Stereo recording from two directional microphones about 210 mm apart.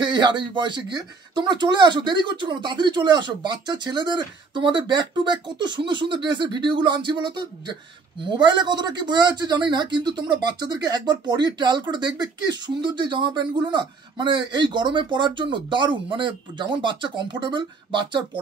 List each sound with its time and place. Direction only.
0.0 s speech: 20° right (ahead or behind)